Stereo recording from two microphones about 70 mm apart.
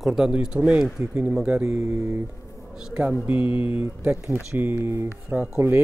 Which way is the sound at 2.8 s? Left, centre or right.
Centre.